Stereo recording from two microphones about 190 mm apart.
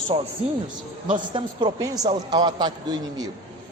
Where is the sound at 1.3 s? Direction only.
25° right (ahead or behind).